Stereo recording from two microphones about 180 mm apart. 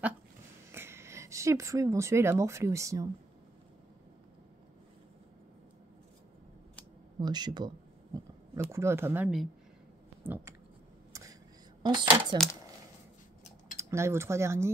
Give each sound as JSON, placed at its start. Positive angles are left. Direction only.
{"t": 0.7, "sound": "speech", "side_deg": -15}
{"t": 7.2, "sound": "speech", "side_deg": -25}
{"t": 10.2, "sound": "a sound", "side_deg": -10}
{"t": 11.8, "sound": "speech", "side_deg": -25}
{"t": 13.7, "sound": "speech", "side_deg": -15}